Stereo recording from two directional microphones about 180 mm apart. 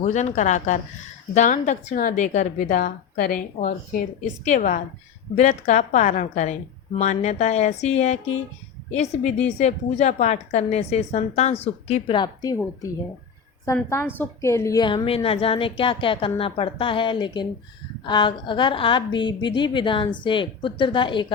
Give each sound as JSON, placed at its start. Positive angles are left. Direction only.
{"t": 0.0, "sound": "a woman's voice", "side_deg": 40}
{"t": 13.9, "sound": "a woman's voice", "side_deg": 10}